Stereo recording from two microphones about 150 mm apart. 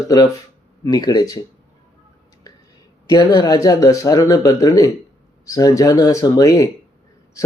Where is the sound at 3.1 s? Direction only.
25° left (ahead or behind).